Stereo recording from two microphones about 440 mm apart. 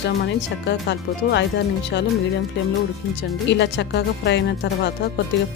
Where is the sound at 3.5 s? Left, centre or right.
Left.